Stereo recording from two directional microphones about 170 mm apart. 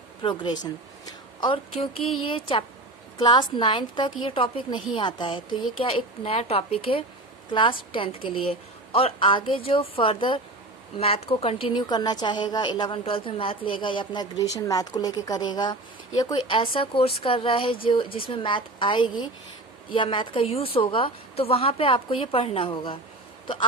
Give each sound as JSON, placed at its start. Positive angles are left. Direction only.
{"t": 0.2, "sound": "a woman's voice", "side_deg": 30}